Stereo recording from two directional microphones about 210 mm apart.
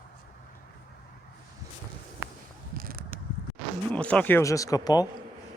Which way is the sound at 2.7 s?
45° right (ahead or behind).